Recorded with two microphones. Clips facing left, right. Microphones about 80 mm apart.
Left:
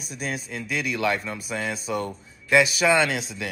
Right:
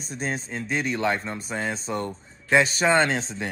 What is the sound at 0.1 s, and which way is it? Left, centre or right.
Speech, right.